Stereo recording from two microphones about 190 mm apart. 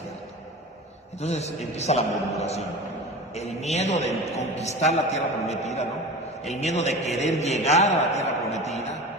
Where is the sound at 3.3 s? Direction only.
35° left (ahead or behind).